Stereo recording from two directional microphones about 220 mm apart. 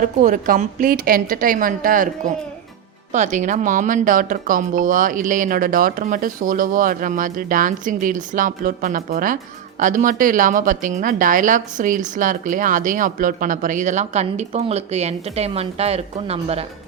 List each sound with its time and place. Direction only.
0.0 s a woman's voice: 35° right (ahead or behind)
3.1 s a woman's voice: 35° right (ahead or behind)